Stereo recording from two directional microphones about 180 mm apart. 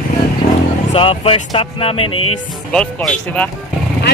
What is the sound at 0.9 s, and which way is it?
Speech, 30° left (ahead or behind).